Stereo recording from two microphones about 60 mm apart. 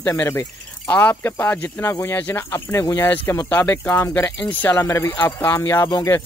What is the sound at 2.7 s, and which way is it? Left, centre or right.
Speech, left.